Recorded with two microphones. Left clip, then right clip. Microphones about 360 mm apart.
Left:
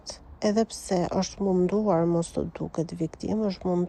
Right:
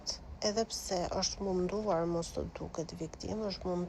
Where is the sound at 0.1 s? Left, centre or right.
Left.